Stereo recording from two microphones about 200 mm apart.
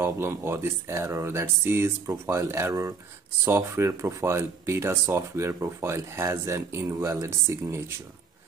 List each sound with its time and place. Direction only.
0.0 s speech: 10° right (ahead or behind)